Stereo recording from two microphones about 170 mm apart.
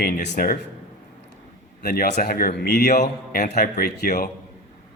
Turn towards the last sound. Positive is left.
turn(degrees=65)  # may be behind; listen again after turning